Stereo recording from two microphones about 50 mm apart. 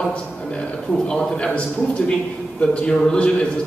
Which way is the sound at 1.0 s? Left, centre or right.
Centre.